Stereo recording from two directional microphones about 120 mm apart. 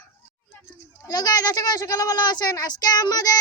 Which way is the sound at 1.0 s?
30° left (ahead or behind).